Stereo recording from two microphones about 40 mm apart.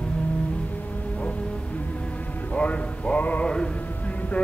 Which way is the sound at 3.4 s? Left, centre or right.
Left.